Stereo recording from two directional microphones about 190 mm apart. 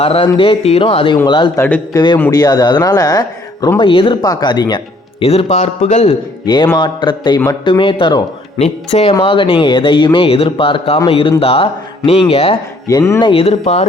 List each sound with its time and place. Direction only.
0.0 s a man's voice: 30° left (ahead or behind)
1.6 s a man's voice: 10° left (ahead or behind); by 6.1 s 35° left (ahead or behind)
6.4 s speech: 20° left (ahead or behind)
12.9 s speech: 20° left (ahead or behind); by 13.8 s 35° left (ahead or behind)